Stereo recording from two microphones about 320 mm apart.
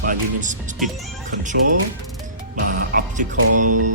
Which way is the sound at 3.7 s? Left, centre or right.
Right.